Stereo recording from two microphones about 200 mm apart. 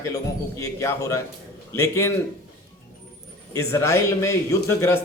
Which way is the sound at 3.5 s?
15° left (ahead or behind).